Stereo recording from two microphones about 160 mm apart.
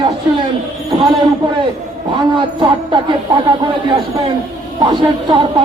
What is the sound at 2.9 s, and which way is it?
A woman's voice, 30° right (ahead or behind).